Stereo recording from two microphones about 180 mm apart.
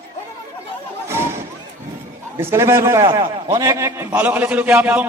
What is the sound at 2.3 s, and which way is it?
A man's voice, 15° right (ahead or behind).